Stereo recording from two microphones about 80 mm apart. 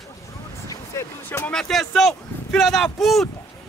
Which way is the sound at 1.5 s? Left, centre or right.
Centre.